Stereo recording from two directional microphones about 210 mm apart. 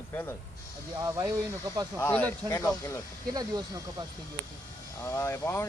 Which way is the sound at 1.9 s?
10° left (ahead or behind).